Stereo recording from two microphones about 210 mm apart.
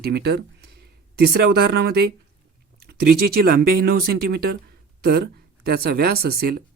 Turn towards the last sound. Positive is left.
turn(degrees=-45)  # may be behind; listen again after turning